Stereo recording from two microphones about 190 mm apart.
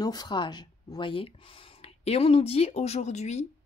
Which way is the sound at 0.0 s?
20° left (ahead or behind).